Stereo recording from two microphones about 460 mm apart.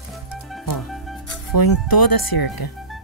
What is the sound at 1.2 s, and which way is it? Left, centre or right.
Speech, left.